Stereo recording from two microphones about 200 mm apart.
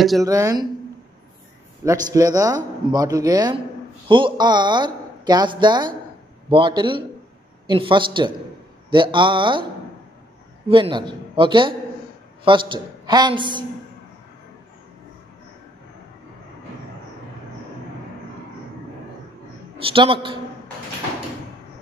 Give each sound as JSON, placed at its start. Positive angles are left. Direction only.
{"t": 0.2, "sound": "a man's voice", "side_deg": -15}
{"t": 1.9, "sound": "a man's voice", "side_deg": -15}
{"t": 10.7, "sound": "speech", "side_deg": -25}
{"t": 19.9, "sound": "speech", "side_deg": -25}